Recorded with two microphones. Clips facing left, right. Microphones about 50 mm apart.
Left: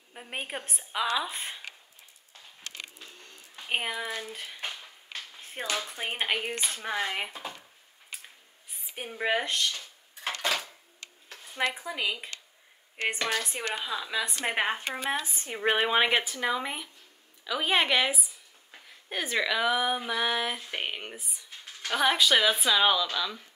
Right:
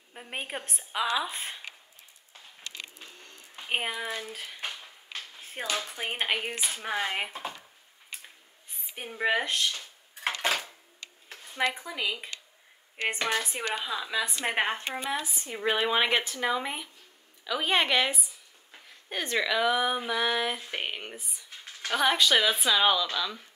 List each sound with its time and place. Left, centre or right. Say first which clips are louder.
0.1 s speech: even; centre
3.0 s a sound: even; centre
5.8 s speech: even; centre
7.3 s speech: right 2 dB; right
8.9 s speech: right 1 dB; centre
10.2 s dishes: right 1 dB; right
11.7 s speech: left 1 dB; centre
13.2 s speech: right 1 dB; centre
15.0 s speech: left 3 dB; left
15.9 s a woman's voice: left 1 dB; centre